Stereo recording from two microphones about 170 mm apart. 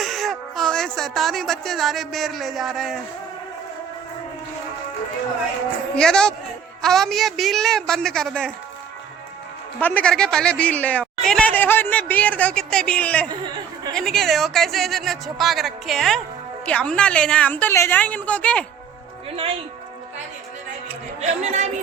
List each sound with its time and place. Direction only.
0.0 s speech: centre (ahead or behind)
6.0 s speech: 5° left (ahead or behind)
9.8 s speech: 10° left (ahead or behind)
21.2 s speech: 40° right (ahead or behind)